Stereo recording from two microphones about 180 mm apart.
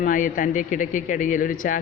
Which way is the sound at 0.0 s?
50° left (ahead or behind).